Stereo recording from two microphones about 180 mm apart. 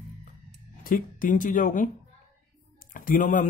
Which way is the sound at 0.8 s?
50° left (ahead or behind).